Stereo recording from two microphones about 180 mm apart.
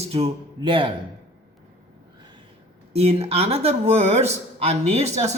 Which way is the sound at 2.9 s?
35° right (ahead or behind).